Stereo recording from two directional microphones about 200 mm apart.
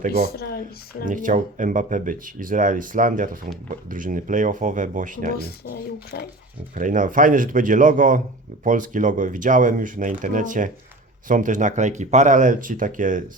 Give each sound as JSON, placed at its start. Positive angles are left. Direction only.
{"t": 0.3, "sound": "speech", "side_deg": 50}
{"t": 1.0, "sound": "speech", "side_deg": -40}
{"t": 5.4, "sound": "speech", "side_deg": 50}
{"t": 6.7, "sound": "speech", "side_deg": -40}